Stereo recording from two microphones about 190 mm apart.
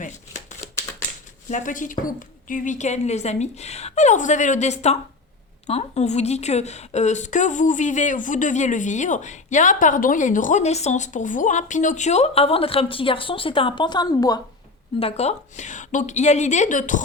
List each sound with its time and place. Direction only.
1.5 s a woman's voice: 40° left (ahead or behind); by 14.4 s 20° left (ahead or behind)
14.9 s a woman's voice: 30° left (ahead or behind)